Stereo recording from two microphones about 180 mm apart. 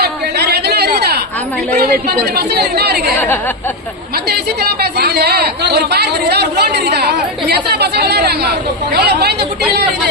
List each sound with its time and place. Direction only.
0.0 s a sound: 65° right (ahead or behind)
1.7 s speech: 60° right (ahead or behind)
4.3 s speech: 60° right (ahead or behind)